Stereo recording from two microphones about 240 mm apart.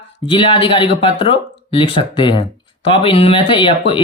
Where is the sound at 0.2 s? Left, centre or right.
Left.